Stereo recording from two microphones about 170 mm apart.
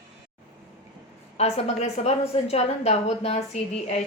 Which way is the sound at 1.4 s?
40° left (ahead or behind).